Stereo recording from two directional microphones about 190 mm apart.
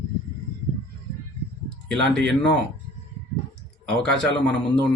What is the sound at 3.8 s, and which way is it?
Speech, 5° left (ahead or behind).